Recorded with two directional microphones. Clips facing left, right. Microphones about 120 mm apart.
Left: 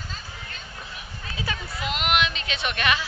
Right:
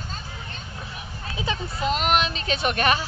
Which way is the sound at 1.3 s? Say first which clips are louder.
Right 4 dB; 25° right (ahead or behind).